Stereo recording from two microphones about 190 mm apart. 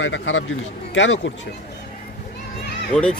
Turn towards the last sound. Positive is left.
turn(degrees=5)  # may be behind; listen again after turning